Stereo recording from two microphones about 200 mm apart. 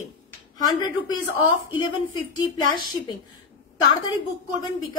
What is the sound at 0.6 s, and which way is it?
Speech, 20° left (ahead or behind).